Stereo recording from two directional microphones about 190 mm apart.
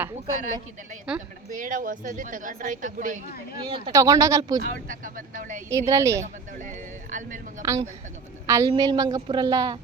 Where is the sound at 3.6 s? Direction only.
25° right (ahead or behind).